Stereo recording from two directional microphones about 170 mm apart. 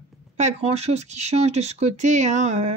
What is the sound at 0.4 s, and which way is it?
Speech, 40° right (ahead or behind).